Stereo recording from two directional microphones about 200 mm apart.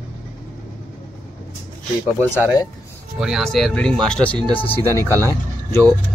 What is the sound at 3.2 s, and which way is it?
Speech, centre (ahead or behind).